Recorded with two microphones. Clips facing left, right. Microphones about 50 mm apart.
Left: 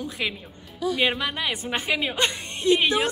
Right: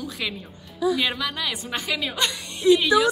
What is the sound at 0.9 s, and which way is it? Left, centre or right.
A woman's voice, left.